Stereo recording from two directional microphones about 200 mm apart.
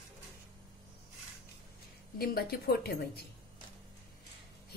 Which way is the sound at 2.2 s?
50° left (ahead or behind).